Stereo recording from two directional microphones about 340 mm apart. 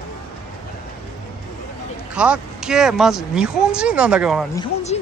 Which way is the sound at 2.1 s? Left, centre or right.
Centre.